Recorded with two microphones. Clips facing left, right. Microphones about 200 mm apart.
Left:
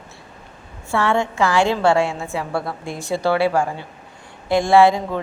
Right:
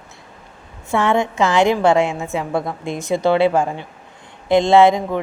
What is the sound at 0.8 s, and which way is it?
Speech, 20° right (ahead or behind).